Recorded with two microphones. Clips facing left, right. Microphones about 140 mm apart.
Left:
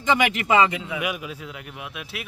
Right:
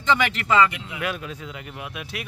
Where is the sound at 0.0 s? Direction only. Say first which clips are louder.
Left 1 dB; 15° left (ahead or behind).